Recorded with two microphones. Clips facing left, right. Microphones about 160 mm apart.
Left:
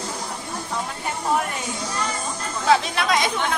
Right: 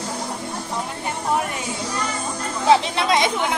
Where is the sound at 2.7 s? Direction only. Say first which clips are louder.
Right 2 dB; 25° right (ahead or behind).